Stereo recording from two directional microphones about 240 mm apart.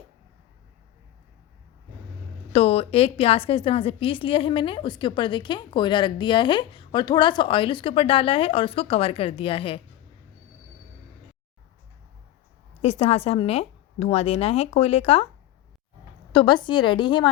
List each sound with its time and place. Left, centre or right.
2.5 s a woman's voice: left
12.8 s a woman's voice: left
16.3 s a woman's voice: centre